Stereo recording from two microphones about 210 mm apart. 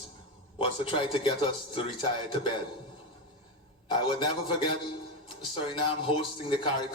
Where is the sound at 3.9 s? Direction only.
20° left (ahead or behind).